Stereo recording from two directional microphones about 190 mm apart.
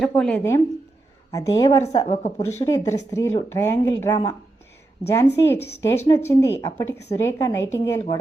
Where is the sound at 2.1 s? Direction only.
40° left (ahead or behind).